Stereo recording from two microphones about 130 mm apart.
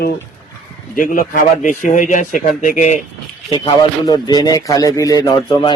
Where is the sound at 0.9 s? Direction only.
90° left; by 3.0 s 75° left (ahead or behind).